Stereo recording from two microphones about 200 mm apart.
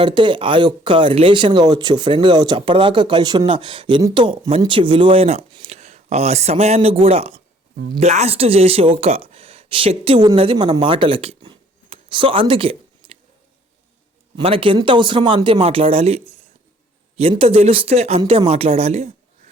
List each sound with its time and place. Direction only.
0.0 s speech: 25° right (ahead or behind)
14.3 s speech: 25° right (ahead or behind)